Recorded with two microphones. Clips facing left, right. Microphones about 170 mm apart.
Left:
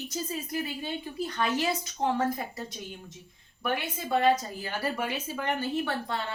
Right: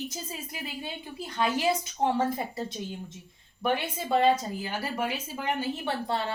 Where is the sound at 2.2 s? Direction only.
25° right (ahead or behind).